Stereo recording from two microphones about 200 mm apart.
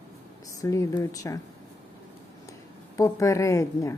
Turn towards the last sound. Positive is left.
turn(degrees=15)  # may be behind; listen again after turning